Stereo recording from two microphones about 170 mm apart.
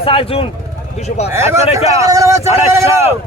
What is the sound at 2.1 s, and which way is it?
Speech, 20° right (ahead or behind).